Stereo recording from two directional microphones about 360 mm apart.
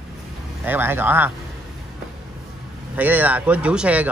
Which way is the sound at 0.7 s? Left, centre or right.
Centre.